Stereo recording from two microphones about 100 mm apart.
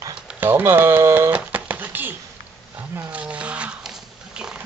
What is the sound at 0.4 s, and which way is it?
Speech, 20° right (ahead or behind).